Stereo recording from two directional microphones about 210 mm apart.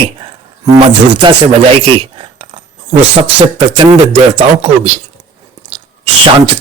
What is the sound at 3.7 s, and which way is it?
Speech, 25° right (ahead or behind).